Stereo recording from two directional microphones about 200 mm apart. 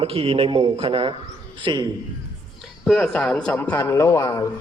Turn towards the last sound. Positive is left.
turn(degrees=15)  # may be behind; listen again after turning